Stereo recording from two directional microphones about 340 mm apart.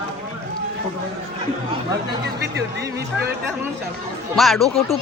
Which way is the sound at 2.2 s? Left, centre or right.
Right.